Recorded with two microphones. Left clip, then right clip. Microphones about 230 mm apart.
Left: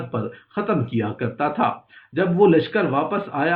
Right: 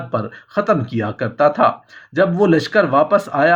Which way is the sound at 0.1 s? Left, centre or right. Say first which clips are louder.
Right 10 dB; right.